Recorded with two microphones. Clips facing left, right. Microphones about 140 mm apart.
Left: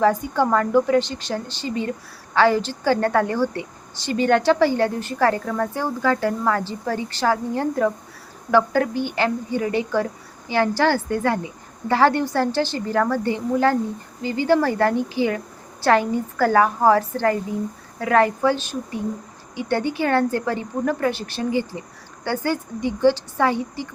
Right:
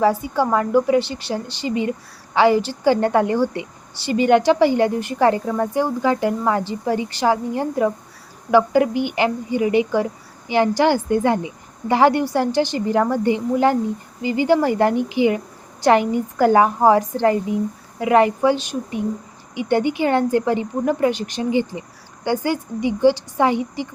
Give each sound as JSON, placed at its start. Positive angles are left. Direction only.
{"t": 0.0, "sound": "a woman's voice", "side_deg": -10}